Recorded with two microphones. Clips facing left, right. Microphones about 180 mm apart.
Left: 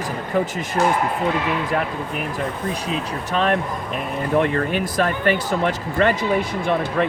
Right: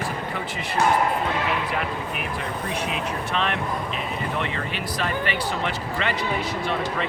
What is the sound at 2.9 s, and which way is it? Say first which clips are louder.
Speech: left 3 dB; 40° left (ahead or behind).